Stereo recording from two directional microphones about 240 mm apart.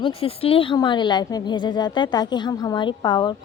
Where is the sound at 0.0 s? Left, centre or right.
Left.